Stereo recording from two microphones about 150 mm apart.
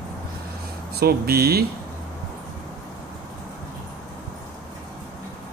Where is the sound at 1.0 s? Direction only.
90° right.